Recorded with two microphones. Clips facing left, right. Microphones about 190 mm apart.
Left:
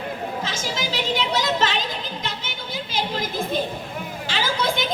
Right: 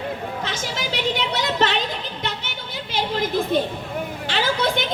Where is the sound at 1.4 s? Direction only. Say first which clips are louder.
Right 2 dB; 60° right (ahead or behind).